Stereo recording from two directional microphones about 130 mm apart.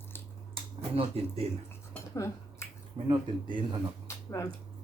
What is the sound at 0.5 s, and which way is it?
Speech, 45° right (ahead or behind).